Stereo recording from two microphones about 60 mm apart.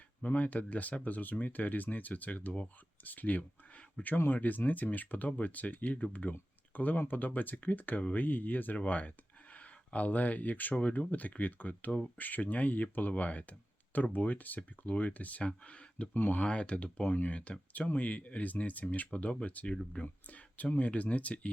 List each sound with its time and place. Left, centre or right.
0.2 s speech: left
16.1 s speech: left
16.4 s speech: centre